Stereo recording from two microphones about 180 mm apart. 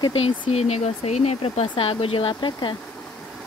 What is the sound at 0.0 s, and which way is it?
Speech, 30° left (ahead or behind).